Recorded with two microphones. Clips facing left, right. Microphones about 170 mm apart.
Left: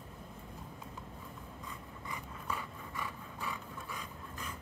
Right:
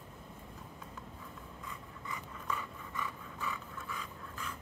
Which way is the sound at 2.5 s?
10° left (ahead or behind).